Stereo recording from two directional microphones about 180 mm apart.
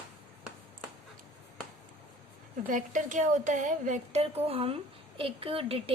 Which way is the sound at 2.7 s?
45° right (ahead or behind).